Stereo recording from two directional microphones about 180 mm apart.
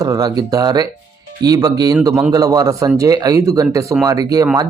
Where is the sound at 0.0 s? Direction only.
20° right (ahead or behind).